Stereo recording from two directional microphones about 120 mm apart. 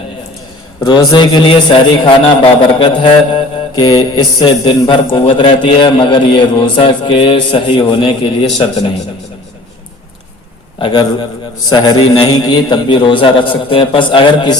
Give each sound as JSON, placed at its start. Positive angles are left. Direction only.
{"t": 0.9, "sound": "a man's voice", "side_deg": 40}
{"t": 4.4, "sound": "a man's voice", "side_deg": 45}
{"t": 10.8, "sound": "a man's voice", "side_deg": 40}